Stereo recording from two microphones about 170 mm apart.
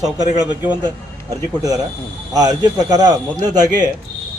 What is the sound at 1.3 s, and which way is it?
A man's voice, 20° right (ahead or behind).